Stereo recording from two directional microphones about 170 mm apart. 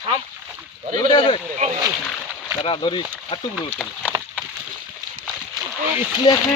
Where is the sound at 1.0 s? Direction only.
25° left (ahead or behind).